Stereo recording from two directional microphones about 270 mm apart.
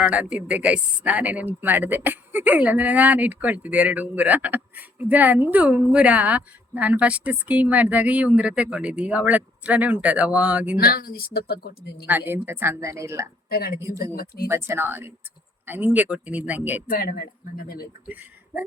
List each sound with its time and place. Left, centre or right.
0.0 s speech: centre
10.8 s a woman's voice: left
12.3 s speech: centre
13.5 s a woman's voice: left
13.7 s speech: centre
14.0 s a woman's voice: left
14.4 s speech: centre
16.9 s a woman's voice: left
18.0 s speech: centre